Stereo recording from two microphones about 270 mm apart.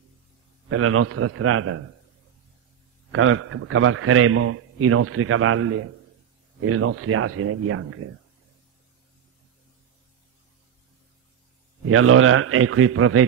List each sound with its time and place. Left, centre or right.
0.7 s a man's voice: right
3.1 s a man's voice: right
11.9 s a man's voice: right